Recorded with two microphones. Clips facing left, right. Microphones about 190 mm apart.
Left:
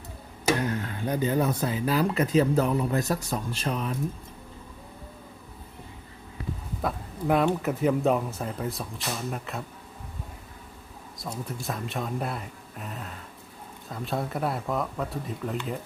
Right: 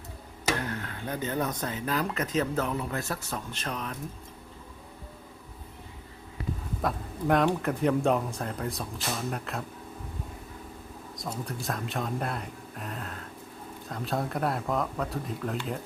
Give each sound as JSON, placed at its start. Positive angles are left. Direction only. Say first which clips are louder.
{"t": 0.6, "sound": "speech", "louder": "left 6 dB", "side_deg": 15}
{"t": 6.8, "sound": "speech", "louder": "left 1 dB", "side_deg": 5}
{"t": 11.2, "sound": "speech", "louder": "even", "side_deg": 0}